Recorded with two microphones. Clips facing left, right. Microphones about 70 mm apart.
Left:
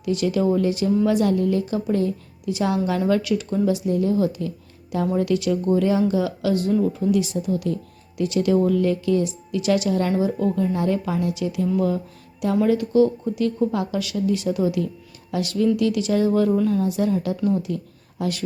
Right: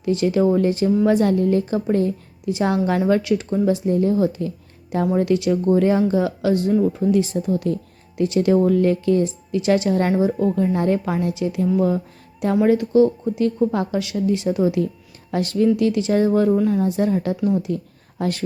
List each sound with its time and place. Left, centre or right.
0.0 s a woman's voice: right
10.8 s a woman's voice: right